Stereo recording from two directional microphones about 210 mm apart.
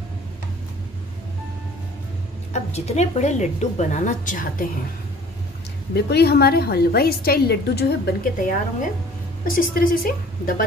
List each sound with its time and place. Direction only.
2.5 s a woman's voice: 30° left (ahead or behind)
5.9 s a woman's voice: 50° left (ahead or behind)